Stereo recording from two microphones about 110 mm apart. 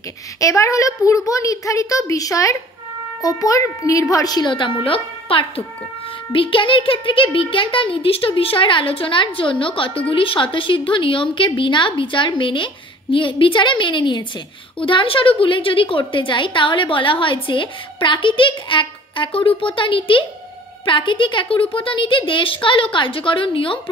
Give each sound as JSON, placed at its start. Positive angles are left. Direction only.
{"t": 0.4, "sound": "a woman's voice", "side_deg": 30}